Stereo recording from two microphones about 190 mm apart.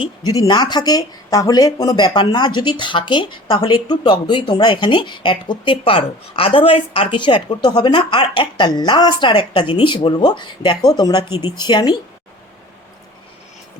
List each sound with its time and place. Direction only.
0.3 s speech: 20° left (ahead or behind)